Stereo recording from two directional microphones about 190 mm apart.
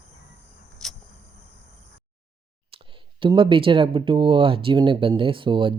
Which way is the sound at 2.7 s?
25° right (ahead or behind).